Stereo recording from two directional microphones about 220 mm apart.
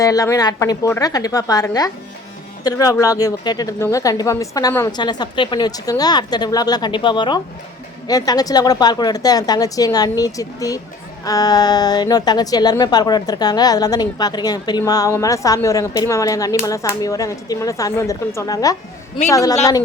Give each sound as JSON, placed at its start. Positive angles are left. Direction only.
{"t": 0.0, "sound": "a woman's voice", "side_deg": 15}